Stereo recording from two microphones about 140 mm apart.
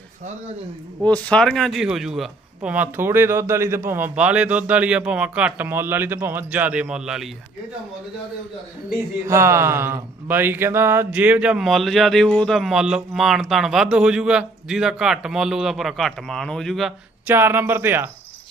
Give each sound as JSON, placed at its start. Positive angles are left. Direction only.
{"t": 1.0, "sound": "a man's voice", "side_deg": 10}
{"t": 9.2, "sound": "speech", "side_deg": -20}
{"t": 17.2, "sound": "a man's voice", "side_deg": -15}